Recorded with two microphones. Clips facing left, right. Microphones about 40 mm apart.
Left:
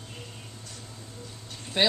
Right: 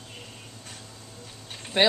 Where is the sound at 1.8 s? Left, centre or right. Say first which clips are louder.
Right 3 dB; right.